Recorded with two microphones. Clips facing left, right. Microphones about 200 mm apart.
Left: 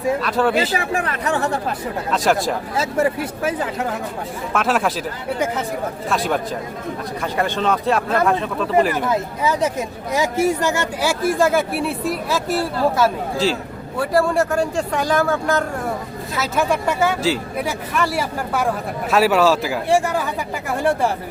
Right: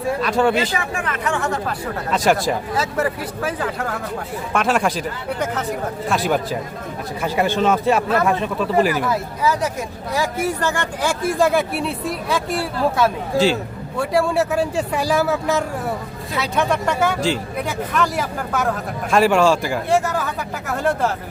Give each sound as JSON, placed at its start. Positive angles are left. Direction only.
{"t": 0.2, "sound": "speech", "side_deg": 0}
{"t": 0.5, "sound": "speech", "side_deg": 35}
{"t": 2.0, "sound": "speech", "side_deg": 0}
{"t": 2.7, "sound": "speech", "side_deg": 25}
{"t": 4.5, "sound": "speech", "side_deg": 0}
{"t": 9.0, "sound": "speech", "side_deg": 25}
{"t": 10.2, "sound": "speech", "side_deg": 15}
{"t": 20.1, "sound": "speech", "side_deg": 15}